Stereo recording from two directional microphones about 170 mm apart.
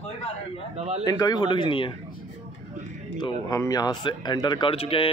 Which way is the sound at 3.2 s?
20° left (ahead or behind).